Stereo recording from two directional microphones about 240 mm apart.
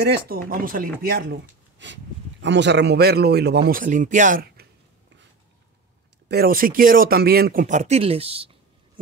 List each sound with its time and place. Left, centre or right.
0.0 s speech: right
6.2 s speech: right